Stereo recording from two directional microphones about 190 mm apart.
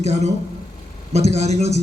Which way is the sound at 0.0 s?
35° right (ahead or behind).